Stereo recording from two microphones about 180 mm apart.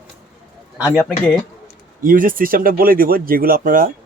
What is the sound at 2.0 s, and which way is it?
Speech, 50° right (ahead or behind).